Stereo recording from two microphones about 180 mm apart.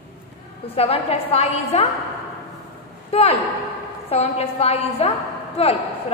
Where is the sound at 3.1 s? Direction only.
35° left (ahead or behind).